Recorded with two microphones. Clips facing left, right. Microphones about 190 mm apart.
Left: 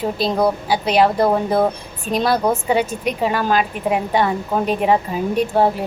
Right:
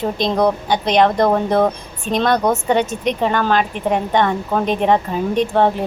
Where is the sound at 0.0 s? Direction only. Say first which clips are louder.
Right 1 dB; 5° left (ahead or behind).